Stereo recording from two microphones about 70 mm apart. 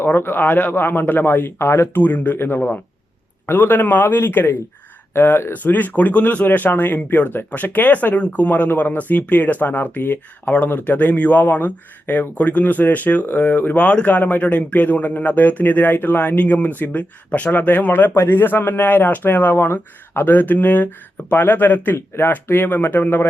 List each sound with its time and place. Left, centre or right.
0.0 s speech: left